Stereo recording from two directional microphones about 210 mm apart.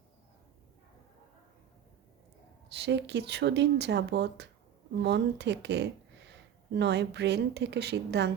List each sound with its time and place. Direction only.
2.6 s speech: 55° right (ahead or behind)